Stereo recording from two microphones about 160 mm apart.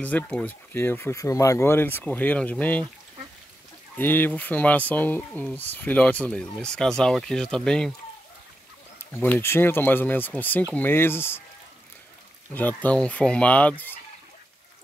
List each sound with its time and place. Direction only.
0.0 s speech: 5° left (ahead or behind)
3.9 s speech: 15° left (ahead or behind)
9.1 s speech: 15° left (ahead or behind)
12.5 s speech: 10° left (ahead or behind)